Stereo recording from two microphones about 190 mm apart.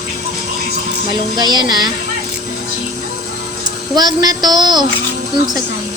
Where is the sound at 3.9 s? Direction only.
20° right (ahead or behind).